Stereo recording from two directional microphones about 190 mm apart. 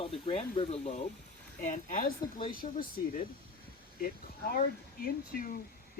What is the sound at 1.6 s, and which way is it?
Speech, 45° left (ahead or behind).